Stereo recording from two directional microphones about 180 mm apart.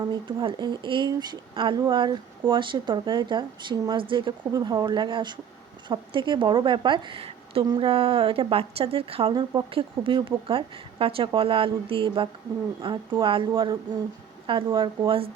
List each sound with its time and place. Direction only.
0.0 s a woman's voice: 25° right (ahead or behind)